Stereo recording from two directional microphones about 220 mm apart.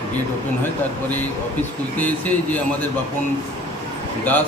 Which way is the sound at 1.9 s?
5° left (ahead or behind).